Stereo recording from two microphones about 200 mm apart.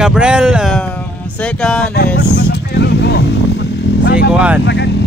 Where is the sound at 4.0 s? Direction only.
55° left (ahead or behind).